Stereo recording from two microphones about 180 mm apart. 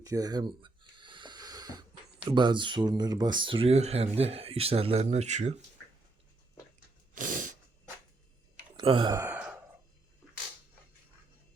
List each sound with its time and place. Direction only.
0.0 s a sound: 20° right (ahead or behind)
2.2 s speech: 25° right (ahead or behind)
7.2 s sneeze: 45° right (ahead or behind)
8.7 s speech: 25° right (ahead or behind)
9.2 s sigh: 5° right (ahead or behind)